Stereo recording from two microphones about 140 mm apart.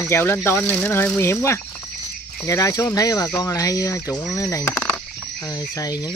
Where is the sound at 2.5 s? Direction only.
25° left (ahead or behind).